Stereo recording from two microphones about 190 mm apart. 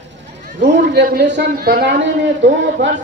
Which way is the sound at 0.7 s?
60° right (ahead or behind).